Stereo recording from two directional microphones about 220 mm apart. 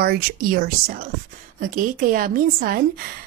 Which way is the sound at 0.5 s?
40° right (ahead or behind).